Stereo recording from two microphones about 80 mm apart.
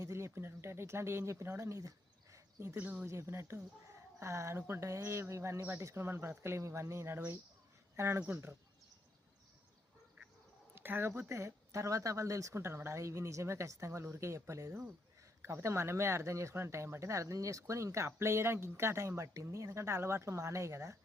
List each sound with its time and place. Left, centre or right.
0.0 s speech: right
2.3 s a sound: right
2.7 s speech: right
3.1 s speech: right
10.8 s speech: right